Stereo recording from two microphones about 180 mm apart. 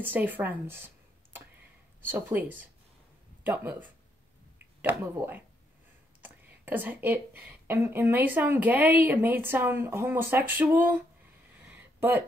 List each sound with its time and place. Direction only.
0.0 s a woman's voice: 10° right (ahead or behind)
4.8 s a woman's voice: 10° right (ahead or behind)
11.7 s a sound: 10° right (ahead or behind)